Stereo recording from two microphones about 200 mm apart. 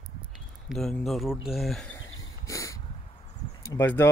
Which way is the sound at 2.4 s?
15° left (ahead or behind).